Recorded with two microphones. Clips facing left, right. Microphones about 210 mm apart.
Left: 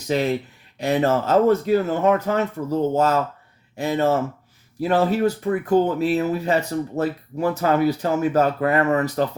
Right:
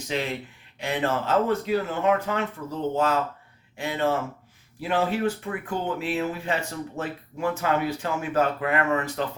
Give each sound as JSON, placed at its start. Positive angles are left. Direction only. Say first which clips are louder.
{"t": 0.1, "sound": "speech", "louder": "left 8 dB", "side_deg": 40}